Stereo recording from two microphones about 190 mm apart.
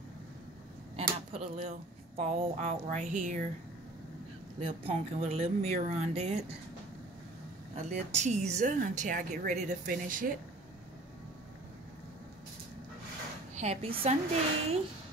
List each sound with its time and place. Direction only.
0.9 s a sound: 30° right (ahead or behind)
1.6 s a woman's voice: 40° right (ahead or behind)
4.6 s a woman's voice: 30° right (ahead or behind)
7.7 s a woman's voice: 35° right (ahead or behind)
13.6 s a woman's voice: 35° right (ahead or behind)